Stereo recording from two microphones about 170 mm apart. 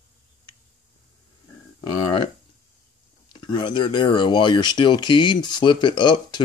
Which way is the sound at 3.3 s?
25° left (ahead or behind).